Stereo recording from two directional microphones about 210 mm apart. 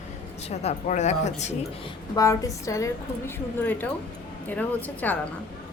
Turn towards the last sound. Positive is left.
turn(degrees=10)  # may be behind; listen again after turning